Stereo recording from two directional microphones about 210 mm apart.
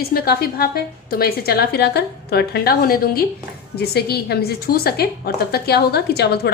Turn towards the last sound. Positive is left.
turn(degrees=50)  # may be behind; listen again after turning